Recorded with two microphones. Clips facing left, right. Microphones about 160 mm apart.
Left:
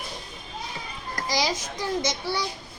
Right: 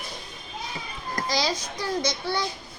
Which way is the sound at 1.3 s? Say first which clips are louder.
Left 1 dB; 15° left (ahead or behind).